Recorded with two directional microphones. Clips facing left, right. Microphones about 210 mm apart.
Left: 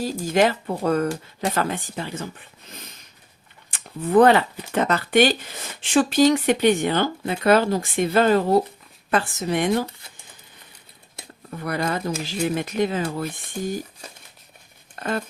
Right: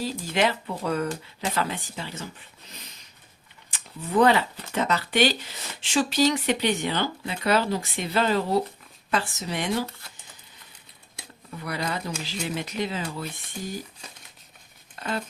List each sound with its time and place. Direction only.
0.0 s speech: 45° left (ahead or behind)
3.7 s a sound: 55° left (ahead or behind)
4.7 s speech: 55° left (ahead or behind)
11.5 s speech: 50° left (ahead or behind)
14.9 s speech: 50° left (ahead or behind)